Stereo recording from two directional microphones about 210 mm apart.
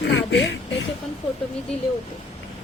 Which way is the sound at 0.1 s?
60° left (ahead or behind).